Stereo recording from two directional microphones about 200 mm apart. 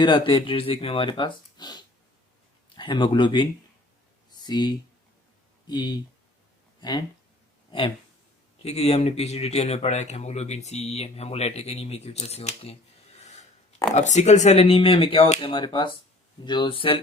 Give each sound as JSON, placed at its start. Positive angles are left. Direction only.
{"t": 0.0, "sound": "speech", "side_deg": 25}
{"t": 4.3, "sound": "a sound", "side_deg": 20}
{"t": 5.6, "sound": "speech", "side_deg": 20}
{"t": 7.7, "sound": "speech", "side_deg": 25}
{"t": 13.1, "sound": "a sound", "side_deg": 35}
{"t": 13.9, "sound": "speech", "side_deg": 35}